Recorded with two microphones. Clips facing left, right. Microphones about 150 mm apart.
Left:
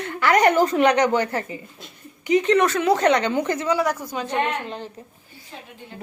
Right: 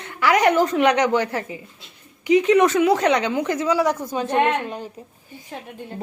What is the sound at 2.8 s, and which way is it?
A woman's voice, 5° right (ahead or behind).